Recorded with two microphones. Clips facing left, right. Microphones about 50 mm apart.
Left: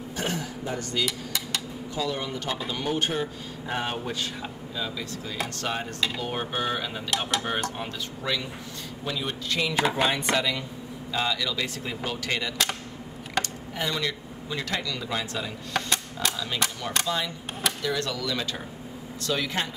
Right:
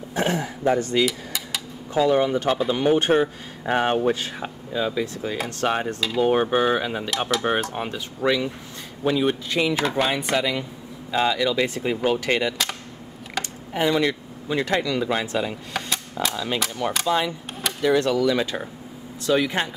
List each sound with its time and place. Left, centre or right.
0.1 s speech: right
1.0 s dishes: centre
2.0 s speech: right
7.1 s speech: centre
7.7 s speech: right
8.2 s speech: right
9.8 s speech: centre
10.1 s speech: centre
11.1 s speech: right
15.7 s dishes: centre
16.8 s speech: right